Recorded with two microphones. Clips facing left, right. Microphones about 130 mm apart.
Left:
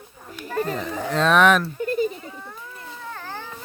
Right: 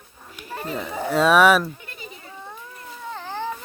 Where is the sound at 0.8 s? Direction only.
10° right (ahead or behind).